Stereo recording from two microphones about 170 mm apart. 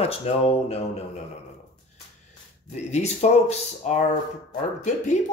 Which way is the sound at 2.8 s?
40° left (ahead or behind).